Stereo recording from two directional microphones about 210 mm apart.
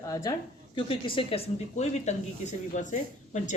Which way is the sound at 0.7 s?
25° left (ahead or behind).